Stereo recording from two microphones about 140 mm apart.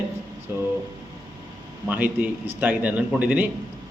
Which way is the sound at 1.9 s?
15° right (ahead or behind).